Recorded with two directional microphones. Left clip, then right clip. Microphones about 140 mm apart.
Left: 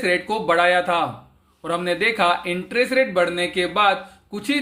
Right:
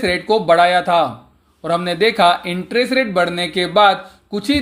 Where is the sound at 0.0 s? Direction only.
30° right (ahead or behind).